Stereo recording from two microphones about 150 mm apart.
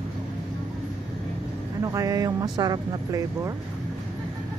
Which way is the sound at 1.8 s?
20° right (ahead or behind).